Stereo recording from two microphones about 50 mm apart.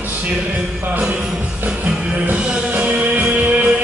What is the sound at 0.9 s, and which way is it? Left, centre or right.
Jingle bell, right.